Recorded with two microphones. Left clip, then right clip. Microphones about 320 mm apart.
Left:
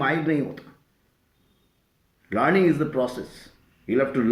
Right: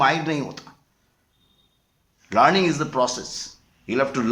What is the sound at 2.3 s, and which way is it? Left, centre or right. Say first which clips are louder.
A man's voice: right 3 dB; right.